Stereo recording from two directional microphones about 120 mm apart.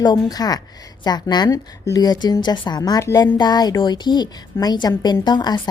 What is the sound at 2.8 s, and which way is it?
A woman's voice, 30° left (ahead or behind).